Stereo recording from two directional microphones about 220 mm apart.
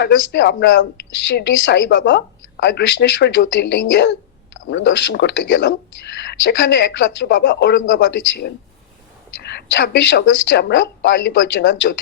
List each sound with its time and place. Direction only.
0.0 s speech: 55° left (ahead or behind)